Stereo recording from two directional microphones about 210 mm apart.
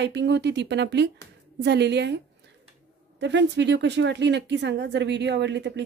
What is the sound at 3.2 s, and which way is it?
A woman's voice, 55° right (ahead or behind).